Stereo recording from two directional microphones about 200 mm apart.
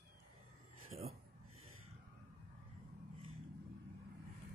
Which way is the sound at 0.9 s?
30° right (ahead or behind).